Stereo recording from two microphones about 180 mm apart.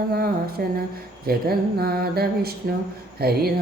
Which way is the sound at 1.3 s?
60° right (ahead or behind).